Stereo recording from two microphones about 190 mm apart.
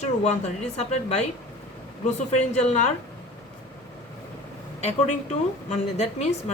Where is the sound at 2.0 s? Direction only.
35° left (ahead or behind).